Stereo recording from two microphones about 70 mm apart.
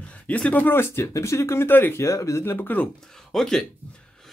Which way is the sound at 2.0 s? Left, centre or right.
Left.